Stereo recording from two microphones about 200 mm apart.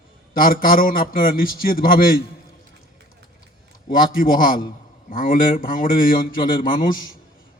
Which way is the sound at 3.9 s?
45° left (ahead or behind).